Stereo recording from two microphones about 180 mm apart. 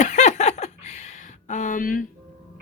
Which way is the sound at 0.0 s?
40° left (ahead or behind).